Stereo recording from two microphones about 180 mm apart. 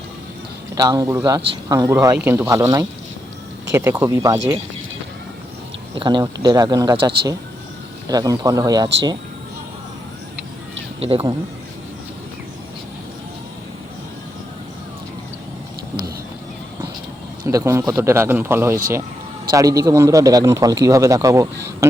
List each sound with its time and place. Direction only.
0.8 s a man's voice: 20° right (ahead or behind)
5.9 s a man's voice: 25° right (ahead or behind)
8.1 s a man's voice: 20° right (ahead or behind)
11.0 s speech: 30° right (ahead or behind)
17.4 s a man's voice: 15° right (ahead or behind)